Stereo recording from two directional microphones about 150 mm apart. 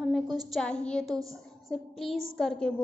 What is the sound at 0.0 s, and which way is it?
A woman's voice, centre (ahead or behind).